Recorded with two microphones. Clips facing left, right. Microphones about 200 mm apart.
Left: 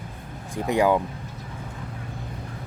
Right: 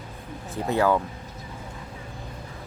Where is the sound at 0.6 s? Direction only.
15° left (ahead or behind).